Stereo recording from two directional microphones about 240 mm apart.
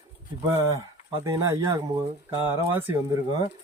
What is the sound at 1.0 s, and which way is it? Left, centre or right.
Speech, centre.